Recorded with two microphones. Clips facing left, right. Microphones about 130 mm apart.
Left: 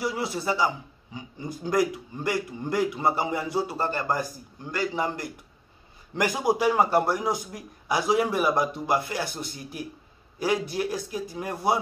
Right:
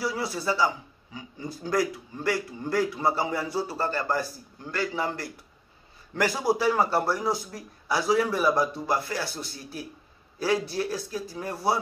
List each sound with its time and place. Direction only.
0.0 s a man's voice: 20° left (ahead or behind)